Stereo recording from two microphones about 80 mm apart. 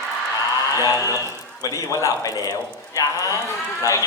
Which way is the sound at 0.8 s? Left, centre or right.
Left.